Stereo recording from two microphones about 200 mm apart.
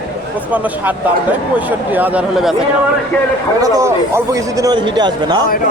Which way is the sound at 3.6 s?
15° right (ahead or behind).